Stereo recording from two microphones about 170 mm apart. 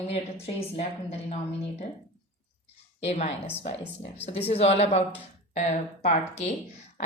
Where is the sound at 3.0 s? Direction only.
40° left (ahead or behind).